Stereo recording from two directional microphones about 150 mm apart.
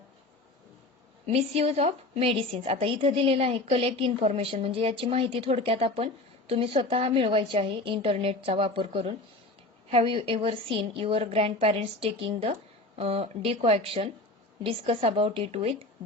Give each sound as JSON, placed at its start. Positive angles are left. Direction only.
{"t": 1.3, "sound": "a woman's voice", "side_deg": -45}